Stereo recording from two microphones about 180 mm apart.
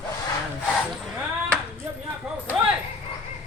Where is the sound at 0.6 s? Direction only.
Centre (ahead or behind).